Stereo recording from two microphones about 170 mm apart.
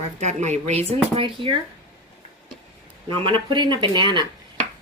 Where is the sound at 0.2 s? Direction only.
45° right (ahead or behind).